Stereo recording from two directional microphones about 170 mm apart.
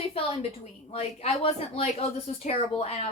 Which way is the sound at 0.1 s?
35° left (ahead or behind).